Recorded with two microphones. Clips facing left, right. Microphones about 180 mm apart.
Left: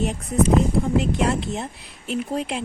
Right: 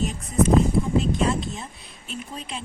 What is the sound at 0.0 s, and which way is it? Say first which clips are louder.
Speech: left 1 dB; 65° left (ahead or behind).